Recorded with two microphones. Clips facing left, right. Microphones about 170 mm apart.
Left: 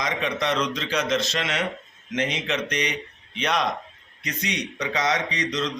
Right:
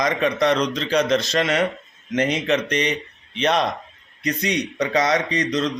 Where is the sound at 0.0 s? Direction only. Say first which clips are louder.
Right 7 dB; 45° right (ahead or behind).